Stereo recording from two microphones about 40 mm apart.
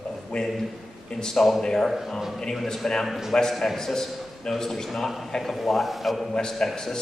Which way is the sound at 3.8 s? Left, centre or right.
Centre.